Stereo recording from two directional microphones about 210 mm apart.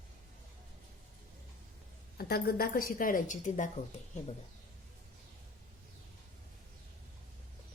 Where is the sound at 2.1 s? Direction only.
45° left (ahead or behind).